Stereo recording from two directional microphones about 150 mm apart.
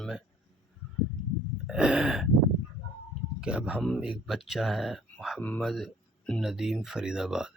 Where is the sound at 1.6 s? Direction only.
5° right (ahead or behind).